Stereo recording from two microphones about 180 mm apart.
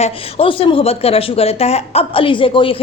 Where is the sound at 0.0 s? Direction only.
30° left (ahead or behind).